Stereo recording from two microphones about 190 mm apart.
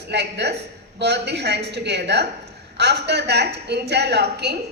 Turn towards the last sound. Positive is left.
turn(degrees=-60)  # may be behind; listen again after turning